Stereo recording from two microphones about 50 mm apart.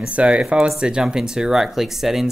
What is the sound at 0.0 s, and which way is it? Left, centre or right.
Speech, right.